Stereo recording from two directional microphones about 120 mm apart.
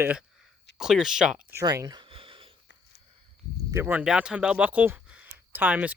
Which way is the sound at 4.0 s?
5° right (ahead or behind).